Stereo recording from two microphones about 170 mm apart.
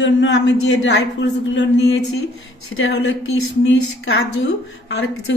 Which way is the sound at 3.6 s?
90° left.